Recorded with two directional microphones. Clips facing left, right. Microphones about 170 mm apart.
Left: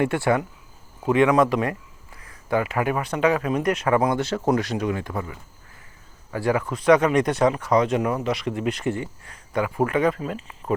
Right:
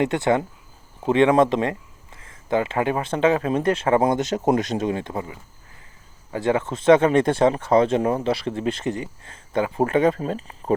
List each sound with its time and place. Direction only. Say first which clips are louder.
0.0 s speech: right 1 dB; 20° right (ahead or behind)